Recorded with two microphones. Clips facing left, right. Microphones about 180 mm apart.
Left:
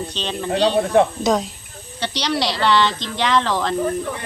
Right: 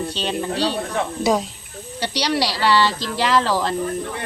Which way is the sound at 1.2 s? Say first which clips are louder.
Even; 5° right (ahead or behind).